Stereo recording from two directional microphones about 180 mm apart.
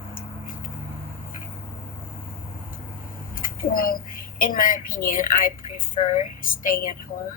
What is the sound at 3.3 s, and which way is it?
A woman's voice, 50° left (ahead or behind).